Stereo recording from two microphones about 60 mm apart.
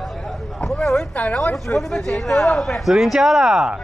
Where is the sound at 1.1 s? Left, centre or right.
Centre.